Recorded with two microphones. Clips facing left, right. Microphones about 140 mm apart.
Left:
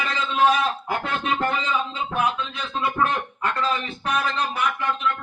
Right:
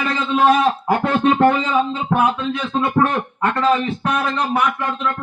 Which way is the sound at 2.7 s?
40° right (ahead or behind).